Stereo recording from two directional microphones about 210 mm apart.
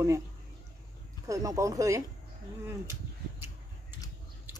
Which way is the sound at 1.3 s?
15° right (ahead or behind).